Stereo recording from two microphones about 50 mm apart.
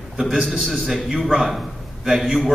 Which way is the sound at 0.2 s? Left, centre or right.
Centre.